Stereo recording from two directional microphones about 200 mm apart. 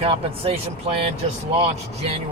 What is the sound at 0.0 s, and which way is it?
A man's voice, 30° right (ahead or behind).